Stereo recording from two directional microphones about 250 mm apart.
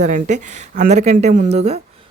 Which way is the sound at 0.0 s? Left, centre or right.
Right.